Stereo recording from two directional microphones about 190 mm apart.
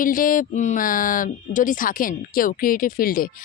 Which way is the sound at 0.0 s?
45° left (ahead or behind).